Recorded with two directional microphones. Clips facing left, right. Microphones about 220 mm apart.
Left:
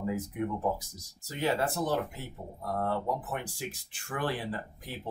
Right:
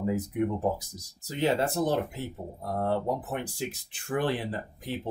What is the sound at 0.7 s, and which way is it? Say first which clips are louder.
Speech: right 3 dB; 20° right (ahead or behind).